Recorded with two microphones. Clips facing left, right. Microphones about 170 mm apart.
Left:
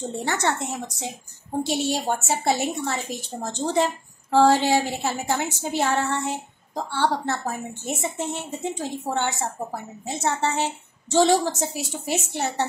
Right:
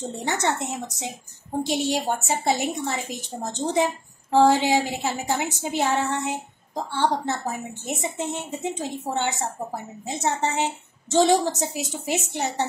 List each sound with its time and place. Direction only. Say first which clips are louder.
0.0 s a woman's voice: left 1 dB; 15° right (ahead or behind)